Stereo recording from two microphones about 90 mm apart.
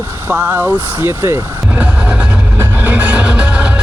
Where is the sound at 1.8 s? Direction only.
15° right (ahead or behind).